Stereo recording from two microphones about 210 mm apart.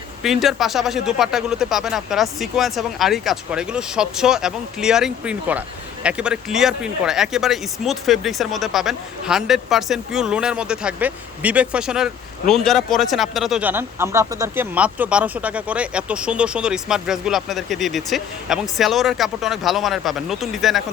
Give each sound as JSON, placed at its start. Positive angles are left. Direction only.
{"t": 0.2, "sound": "speech", "side_deg": 0}